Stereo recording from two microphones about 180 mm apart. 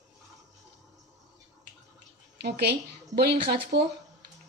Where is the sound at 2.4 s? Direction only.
65° right (ahead or behind).